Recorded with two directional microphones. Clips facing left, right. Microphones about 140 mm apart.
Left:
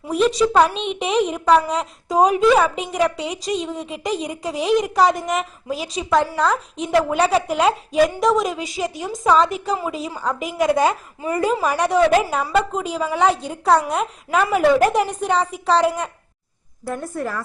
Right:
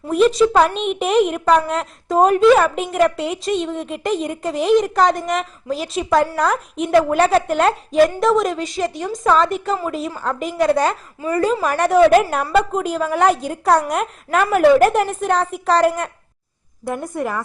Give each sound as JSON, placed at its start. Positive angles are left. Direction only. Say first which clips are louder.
{"t": 0.1, "sound": "a woman's voice", "louder": "right 3 dB", "side_deg": 0}
{"t": 10.6, "sound": "a woman's voice", "louder": "right 1 dB", "side_deg": 15}
{"t": 11.6, "sound": "a woman's voice", "louder": "right 5 dB", "side_deg": 0}
{"t": 16.8, "sound": "a woman's voice", "louder": "right 3 dB", "side_deg": -15}